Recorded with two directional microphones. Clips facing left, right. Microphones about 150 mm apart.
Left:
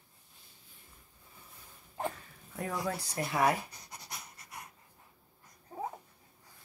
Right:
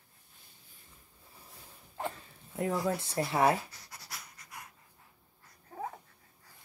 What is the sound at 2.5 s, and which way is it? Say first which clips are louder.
Speech: right 4 dB; 25° right (ahead or behind).